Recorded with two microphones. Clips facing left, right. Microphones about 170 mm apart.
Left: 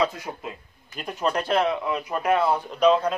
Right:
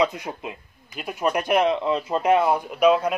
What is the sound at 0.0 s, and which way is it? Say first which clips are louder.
A man's voice: right 2 dB; 20° right (ahead or behind).